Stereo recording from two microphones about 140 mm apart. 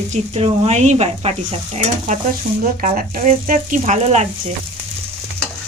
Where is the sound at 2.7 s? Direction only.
80° right; by 4.3 s 55° right (ahead or behind).